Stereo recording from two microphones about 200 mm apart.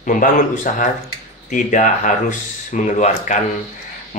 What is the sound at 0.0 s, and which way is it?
Speech, 40° left (ahead or behind).